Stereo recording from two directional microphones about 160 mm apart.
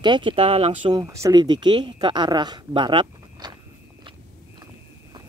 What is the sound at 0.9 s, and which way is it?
Speech, 20° right (ahead or behind).